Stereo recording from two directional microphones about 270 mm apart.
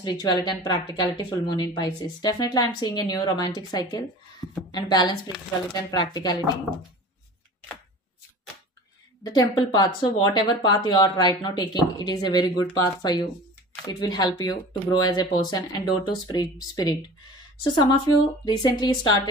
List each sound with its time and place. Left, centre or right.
0.0 s speech: centre
9.2 s speech: centre